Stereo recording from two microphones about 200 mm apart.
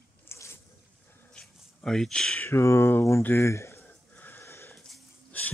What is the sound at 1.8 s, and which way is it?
Speech, 5° left (ahead or behind).